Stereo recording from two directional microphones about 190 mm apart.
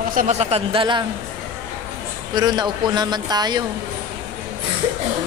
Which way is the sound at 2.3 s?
20° right (ahead or behind).